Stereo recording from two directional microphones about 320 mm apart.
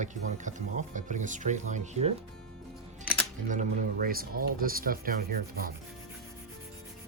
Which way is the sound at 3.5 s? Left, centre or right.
Right.